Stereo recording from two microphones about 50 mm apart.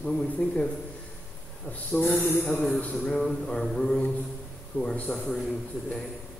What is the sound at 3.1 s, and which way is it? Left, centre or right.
Speech, centre.